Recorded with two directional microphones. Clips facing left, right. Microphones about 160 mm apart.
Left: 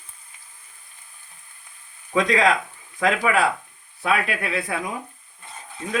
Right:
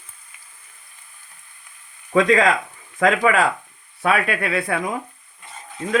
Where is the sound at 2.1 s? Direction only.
65° right (ahead or behind).